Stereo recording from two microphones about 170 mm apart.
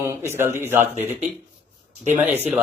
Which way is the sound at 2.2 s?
10° right (ahead or behind).